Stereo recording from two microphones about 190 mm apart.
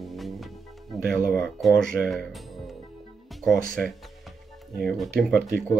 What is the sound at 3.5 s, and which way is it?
Speech, 5° left (ahead or behind).